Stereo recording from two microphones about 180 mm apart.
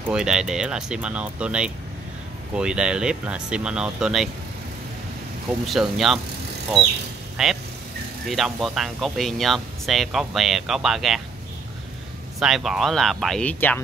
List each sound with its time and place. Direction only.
0.1 s speech: 5° right (ahead or behind)
5.7 s speech: centre (ahead or behind)
7.4 s speech: centre (ahead or behind)
12.4 s speech: centre (ahead or behind)